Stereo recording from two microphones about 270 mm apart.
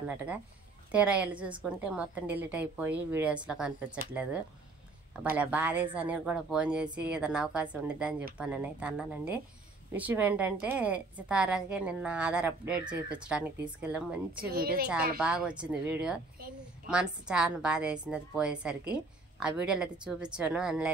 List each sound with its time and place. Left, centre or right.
0.1 s speech: centre
14.5 s a woman's voice: right
15.1 s speech: centre
16.3 s a woman's voice: right
16.9 s speech: centre